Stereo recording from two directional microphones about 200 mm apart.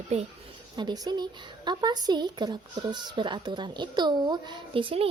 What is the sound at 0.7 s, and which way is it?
Speech, 20° right (ahead or behind).